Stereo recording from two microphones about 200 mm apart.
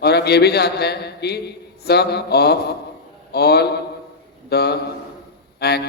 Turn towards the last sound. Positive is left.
turn(degrees=55)  # may be behind; listen again after turning